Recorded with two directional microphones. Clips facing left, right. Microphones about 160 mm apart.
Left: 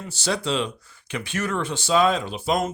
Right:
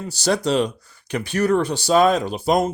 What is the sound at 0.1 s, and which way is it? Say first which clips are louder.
Speech: right 5 dB; 40° right (ahead or behind).